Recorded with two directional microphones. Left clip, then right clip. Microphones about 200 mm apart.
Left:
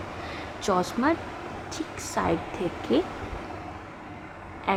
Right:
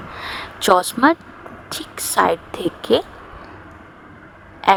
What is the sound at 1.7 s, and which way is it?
A woman's voice, 50° right (ahead or behind).